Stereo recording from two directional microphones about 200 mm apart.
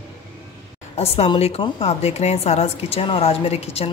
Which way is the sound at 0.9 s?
30° left (ahead or behind).